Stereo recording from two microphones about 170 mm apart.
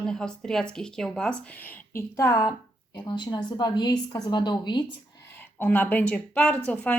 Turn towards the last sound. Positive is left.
turn(degrees=10)  # may be behind; listen again after turning